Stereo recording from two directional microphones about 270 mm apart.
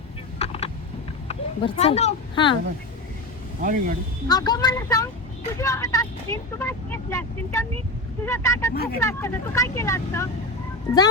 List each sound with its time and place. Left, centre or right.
0.3 s a sound: left
1.3 s speech: left
3.6 s speech: right
4.3 s speech: centre
8.7 s speech: left
9.0 s speech: centre